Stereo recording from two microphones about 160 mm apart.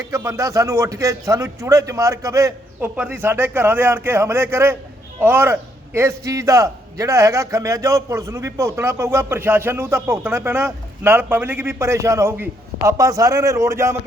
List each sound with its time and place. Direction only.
0.1 s a man's voice: 20° right (ahead or behind)